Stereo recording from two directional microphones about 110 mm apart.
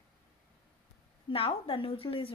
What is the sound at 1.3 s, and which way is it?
Speech, 55° left (ahead or behind).